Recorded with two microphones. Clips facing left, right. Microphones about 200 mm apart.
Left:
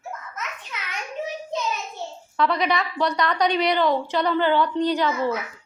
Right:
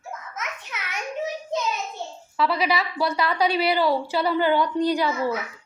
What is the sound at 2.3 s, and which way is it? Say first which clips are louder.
A woman's voice: left 1 dB; 5° right (ahead or behind).